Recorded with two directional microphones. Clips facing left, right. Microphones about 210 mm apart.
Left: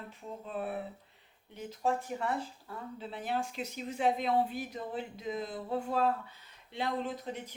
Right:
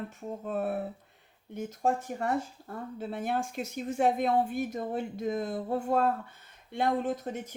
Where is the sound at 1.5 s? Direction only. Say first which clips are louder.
Right 3 dB; 45° right (ahead or behind).